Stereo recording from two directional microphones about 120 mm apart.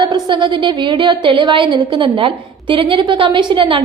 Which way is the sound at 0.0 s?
40° right (ahead or behind).